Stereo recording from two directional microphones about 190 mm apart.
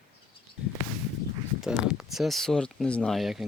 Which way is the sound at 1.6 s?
Centre (ahead or behind).